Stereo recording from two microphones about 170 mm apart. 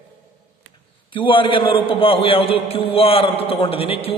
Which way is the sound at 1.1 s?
30° left (ahead or behind).